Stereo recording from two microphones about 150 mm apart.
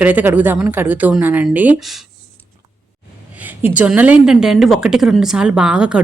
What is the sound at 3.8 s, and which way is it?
A woman's voice, 10° right (ahead or behind).